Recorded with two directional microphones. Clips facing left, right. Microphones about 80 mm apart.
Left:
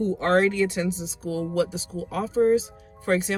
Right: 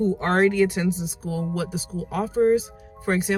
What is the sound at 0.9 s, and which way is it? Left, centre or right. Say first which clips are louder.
Speech: right 4 dB; left.